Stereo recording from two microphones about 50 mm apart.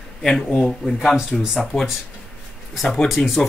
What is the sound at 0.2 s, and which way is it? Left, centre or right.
Speech, centre.